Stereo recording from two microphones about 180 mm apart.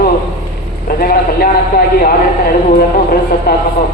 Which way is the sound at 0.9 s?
55° left (ahead or behind).